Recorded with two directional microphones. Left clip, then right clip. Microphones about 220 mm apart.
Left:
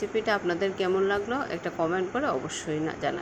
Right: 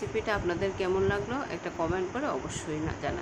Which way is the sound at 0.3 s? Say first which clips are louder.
Left 3 dB; 15° left (ahead or behind).